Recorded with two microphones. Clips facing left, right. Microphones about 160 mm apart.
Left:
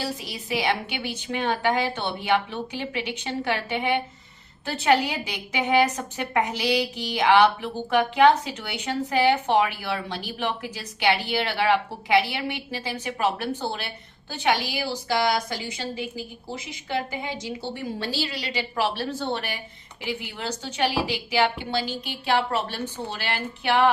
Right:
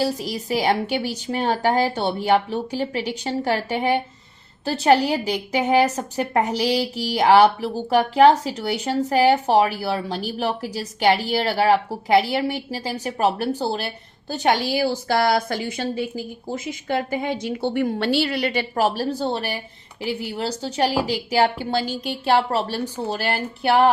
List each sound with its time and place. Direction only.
0.0 s a woman's voice: 40° right (ahead or behind)